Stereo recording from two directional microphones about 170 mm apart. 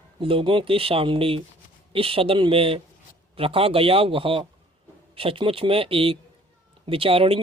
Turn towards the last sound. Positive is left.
turn(degrees=-35)  # may be behind; listen again after turning